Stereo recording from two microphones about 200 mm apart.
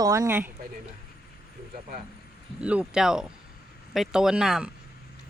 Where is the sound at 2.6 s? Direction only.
5° right (ahead or behind).